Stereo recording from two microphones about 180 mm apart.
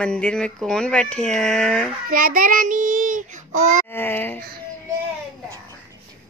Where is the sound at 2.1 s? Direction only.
50° right (ahead or behind).